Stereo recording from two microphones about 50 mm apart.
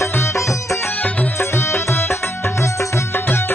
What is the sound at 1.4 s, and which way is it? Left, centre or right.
Music, left.